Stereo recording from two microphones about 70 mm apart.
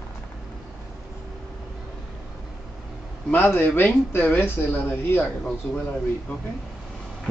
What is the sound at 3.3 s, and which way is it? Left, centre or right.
Speech, left.